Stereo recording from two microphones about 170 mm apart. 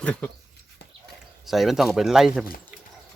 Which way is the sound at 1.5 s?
Centre (ahead or behind).